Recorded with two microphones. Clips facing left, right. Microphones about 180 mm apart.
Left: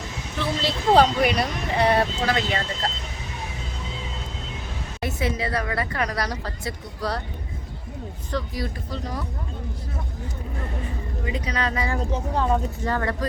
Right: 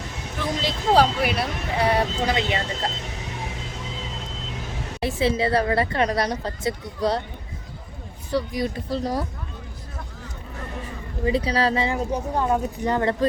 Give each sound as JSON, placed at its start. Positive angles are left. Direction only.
{"t": 0.3, "sound": "speech", "side_deg": -10}
{"t": 2.2, "sound": "a woman's voice", "side_deg": -20}
{"t": 4.9, "sound": "a woman's voice", "side_deg": -30}
{"t": 8.3, "sound": "speech", "side_deg": -15}
{"t": 8.9, "sound": "speech", "side_deg": -35}
{"t": 11.3, "sound": "speech", "side_deg": -30}
{"t": 11.9, "sound": "speech", "side_deg": -10}